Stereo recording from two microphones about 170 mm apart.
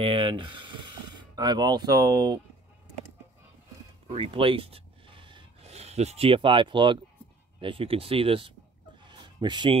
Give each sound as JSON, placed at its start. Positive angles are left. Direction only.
{"t": 0.0, "sound": "speech", "side_deg": -30}
{"t": 4.1, "sound": "speech", "side_deg": -35}
{"t": 9.0, "sound": "a sound", "side_deg": -25}